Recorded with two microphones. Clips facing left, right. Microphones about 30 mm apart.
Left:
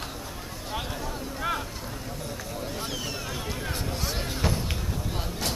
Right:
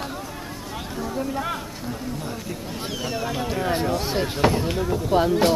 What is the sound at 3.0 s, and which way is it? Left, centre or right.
Speech, centre.